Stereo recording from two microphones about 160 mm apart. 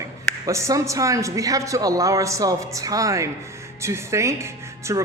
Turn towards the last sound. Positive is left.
turn(degrees=-15)  # may be behind; listen again after turning